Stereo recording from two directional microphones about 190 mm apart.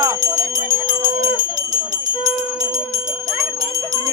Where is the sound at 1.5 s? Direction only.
20° right (ahead or behind).